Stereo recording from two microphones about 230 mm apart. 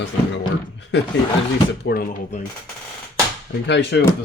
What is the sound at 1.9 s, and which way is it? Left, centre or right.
Speech, left.